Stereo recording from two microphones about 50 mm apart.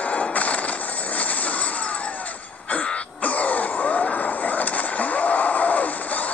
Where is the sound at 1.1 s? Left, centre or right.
Left.